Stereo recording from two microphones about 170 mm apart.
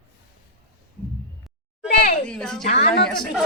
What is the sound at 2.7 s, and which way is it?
Speech, 45° left (ahead or behind).